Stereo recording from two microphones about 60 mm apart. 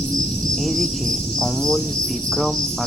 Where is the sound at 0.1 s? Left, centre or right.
Centre.